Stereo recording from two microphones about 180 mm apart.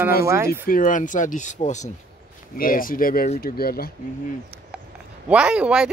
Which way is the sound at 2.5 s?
50° left (ahead or behind).